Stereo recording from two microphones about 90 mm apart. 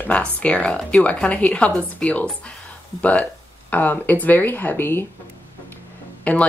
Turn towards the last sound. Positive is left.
turn(degrees=15)  # may be behind; listen again after turning